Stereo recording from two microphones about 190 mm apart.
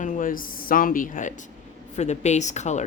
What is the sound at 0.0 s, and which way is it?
Speech, 45° left (ahead or behind).